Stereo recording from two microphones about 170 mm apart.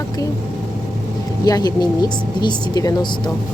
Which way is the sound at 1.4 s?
25° left (ahead or behind).